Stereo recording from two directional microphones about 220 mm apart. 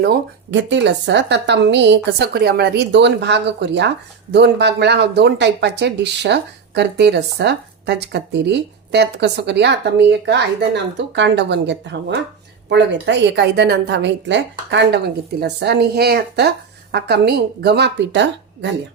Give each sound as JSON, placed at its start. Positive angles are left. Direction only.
{"t": 0.0, "sound": "speech", "side_deg": -50}